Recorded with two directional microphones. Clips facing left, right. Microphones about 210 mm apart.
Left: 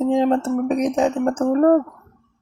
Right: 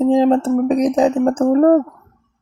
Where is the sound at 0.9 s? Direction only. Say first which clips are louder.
Right 4 dB; 35° right (ahead or behind).